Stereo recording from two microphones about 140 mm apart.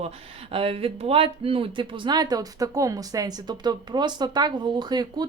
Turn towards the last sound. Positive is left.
turn(degrees=-30)  # may be behind; listen again after turning